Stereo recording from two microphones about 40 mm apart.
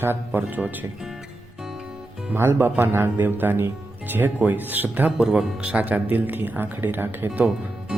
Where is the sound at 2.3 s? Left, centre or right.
Right.